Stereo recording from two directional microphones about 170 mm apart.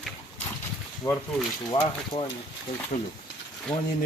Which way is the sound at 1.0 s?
15° left (ahead or behind).